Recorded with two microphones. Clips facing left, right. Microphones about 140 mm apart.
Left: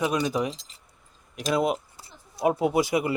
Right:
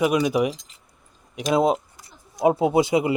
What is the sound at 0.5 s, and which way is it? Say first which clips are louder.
Keys jangling: right 3 dB; 30° left (ahead or behind).